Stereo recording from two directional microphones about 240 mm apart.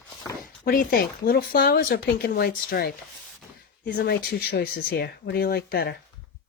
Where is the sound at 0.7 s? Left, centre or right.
Left.